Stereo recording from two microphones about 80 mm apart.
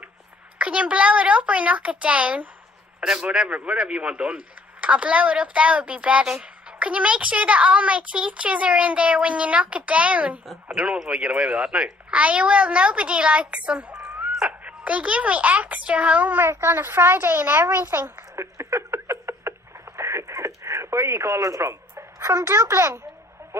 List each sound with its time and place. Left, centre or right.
0.6 s speech: centre
18.3 s a sound: right
23.4 s music: right